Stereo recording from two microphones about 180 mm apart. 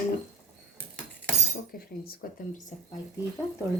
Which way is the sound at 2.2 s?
55° left (ahead or behind).